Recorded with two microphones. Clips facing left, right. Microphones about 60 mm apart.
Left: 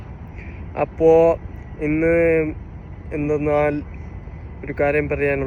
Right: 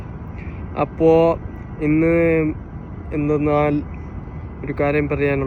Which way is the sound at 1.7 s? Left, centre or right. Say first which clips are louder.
Right 1 dB; centre.